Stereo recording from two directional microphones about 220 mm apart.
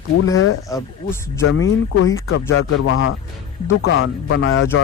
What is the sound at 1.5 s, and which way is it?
Speech, 70° left (ahead or behind).